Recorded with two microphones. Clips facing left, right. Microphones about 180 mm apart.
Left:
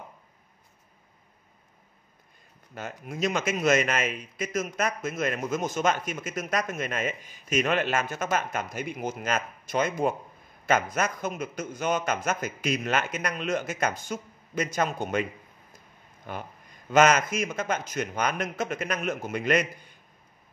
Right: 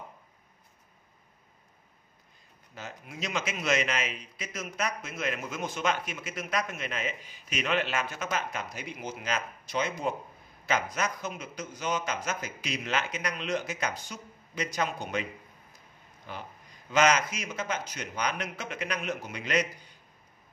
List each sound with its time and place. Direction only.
2.7 s a man's voice: 50° left (ahead or behind)
16.3 s a man's voice: 50° left (ahead or behind)